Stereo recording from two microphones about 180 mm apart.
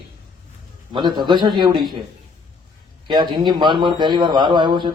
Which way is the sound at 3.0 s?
25° right (ahead or behind).